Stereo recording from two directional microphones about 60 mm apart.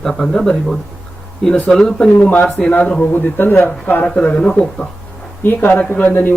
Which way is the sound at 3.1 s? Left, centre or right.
Left.